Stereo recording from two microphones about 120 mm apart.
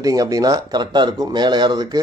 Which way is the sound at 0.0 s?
30° right (ahead or behind).